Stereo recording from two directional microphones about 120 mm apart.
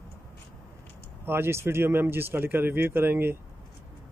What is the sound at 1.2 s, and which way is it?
Speech, 20° right (ahead or behind).